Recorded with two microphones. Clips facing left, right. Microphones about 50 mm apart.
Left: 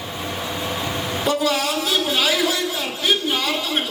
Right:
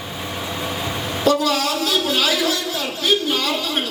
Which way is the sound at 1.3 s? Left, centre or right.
Left.